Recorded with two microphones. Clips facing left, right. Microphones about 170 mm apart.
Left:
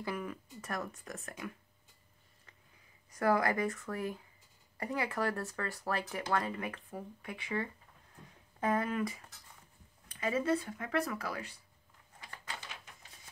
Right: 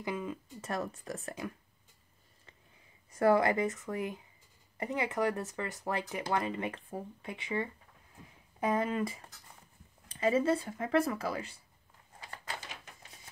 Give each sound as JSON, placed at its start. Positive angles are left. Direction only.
{"t": 0.0, "sound": "speech", "side_deg": -20}
{"t": 3.1, "sound": "speech", "side_deg": -25}